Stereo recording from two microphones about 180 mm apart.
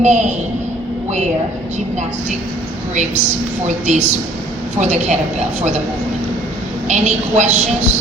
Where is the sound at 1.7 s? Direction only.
40° right (ahead or behind).